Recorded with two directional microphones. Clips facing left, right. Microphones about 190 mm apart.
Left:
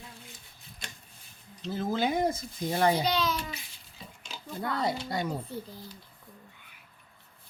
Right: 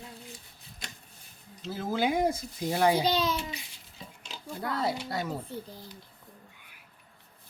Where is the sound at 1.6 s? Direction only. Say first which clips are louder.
Even; 10° right (ahead or behind).